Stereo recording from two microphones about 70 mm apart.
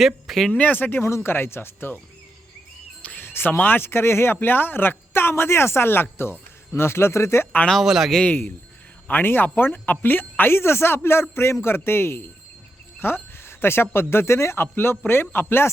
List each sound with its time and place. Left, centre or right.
0.0 s speech: centre
0.5 s speech: left
3.0 s music: left
3.2 s speech: left
7.7 s speech: centre
9.0 s speech: left
13.0 s a sound: left
13.9 s speech: left